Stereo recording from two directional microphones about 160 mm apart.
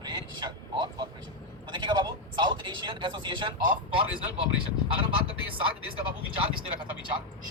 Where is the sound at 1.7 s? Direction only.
30° right (ahead or behind).